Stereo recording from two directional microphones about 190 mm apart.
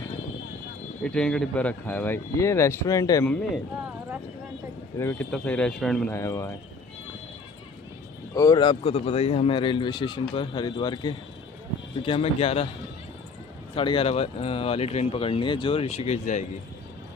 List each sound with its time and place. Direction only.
1.0 s speech: 5° left (ahead or behind)
4.9 s speech: 10° left (ahead or behind)
6.1 s speech: 15° left (ahead or behind)
8.3 s a man's voice: 15° left (ahead or behind)
13.7 s speech: 30° left (ahead or behind)